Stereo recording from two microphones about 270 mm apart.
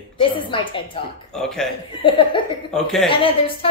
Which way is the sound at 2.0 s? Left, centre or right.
Centre.